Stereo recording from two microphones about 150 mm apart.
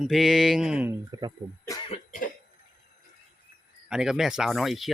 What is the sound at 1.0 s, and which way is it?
Speech, 30° right (ahead or behind).